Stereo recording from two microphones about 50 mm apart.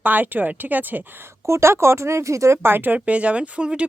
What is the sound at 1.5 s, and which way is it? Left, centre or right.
Speech, right.